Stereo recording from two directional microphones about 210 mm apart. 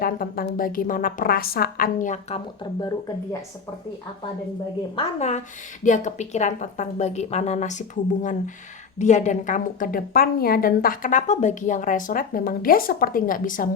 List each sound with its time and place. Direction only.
0.0 s a woman's voice: 45° left (ahead or behind)
4.9 s a woman's voice: 35° left (ahead or behind)